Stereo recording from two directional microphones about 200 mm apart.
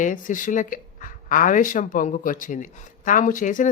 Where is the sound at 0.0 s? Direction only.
40° left (ahead or behind).